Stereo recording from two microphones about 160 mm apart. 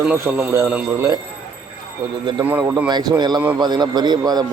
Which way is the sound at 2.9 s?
25° right (ahead or behind).